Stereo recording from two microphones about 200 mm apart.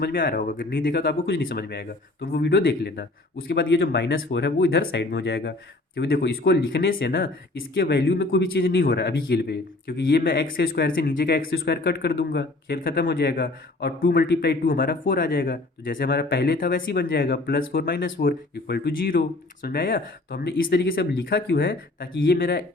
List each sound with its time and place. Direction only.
0.0 s speech: 50° left (ahead or behind)